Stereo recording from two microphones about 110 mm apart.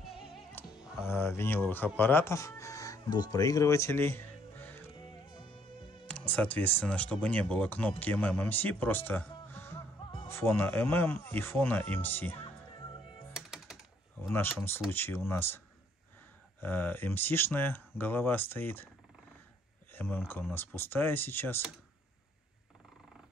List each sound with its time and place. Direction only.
0.6 s music: 20° left (ahead or behind)
1.0 s speech: 20° left (ahead or behind)
4.9 s music: 50° left (ahead or behind)
6.0 s speech: 10° left (ahead or behind)
13.3 s music: 5° right (ahead or behind)
14.3 s speech: 20° left (ahead or behind)
16.6 s speech: 20° left (ahead or behind)
19.9 s speech: 20° left (ahead or behind)